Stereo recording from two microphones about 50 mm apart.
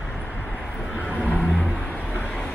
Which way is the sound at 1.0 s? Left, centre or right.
Left.